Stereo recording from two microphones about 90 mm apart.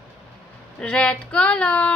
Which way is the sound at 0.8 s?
10° left (ahead or behind).